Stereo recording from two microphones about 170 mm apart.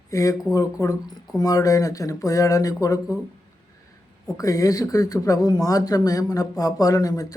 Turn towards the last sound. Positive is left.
turn(degrees=20)  # may be behind; listen again after turning